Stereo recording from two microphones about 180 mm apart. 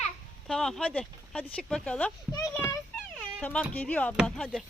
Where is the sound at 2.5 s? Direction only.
10° left (ahead or behind).